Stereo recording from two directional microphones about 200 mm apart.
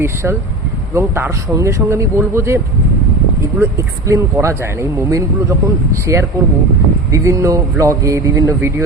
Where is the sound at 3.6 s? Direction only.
15° right (ahead or behind).